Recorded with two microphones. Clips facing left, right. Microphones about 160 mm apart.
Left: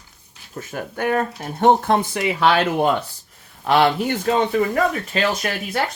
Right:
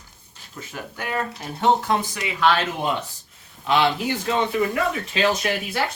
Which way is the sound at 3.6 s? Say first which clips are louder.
Left 4 dB; 50° left (ahead or behind).